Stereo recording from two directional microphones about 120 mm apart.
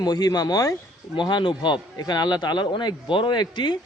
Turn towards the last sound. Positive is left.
turn(degrees=40)  # may be behind; listen again after turning